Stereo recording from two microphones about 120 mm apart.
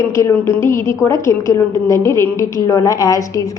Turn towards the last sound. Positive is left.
turn(degrees=25)  # may be behind; listen again after turning